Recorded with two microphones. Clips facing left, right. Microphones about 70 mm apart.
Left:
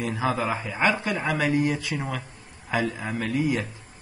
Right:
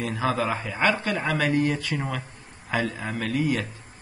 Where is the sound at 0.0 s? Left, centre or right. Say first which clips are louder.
Even; centre.